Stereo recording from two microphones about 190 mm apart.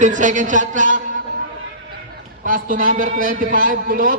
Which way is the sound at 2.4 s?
45° right (ahead or behind).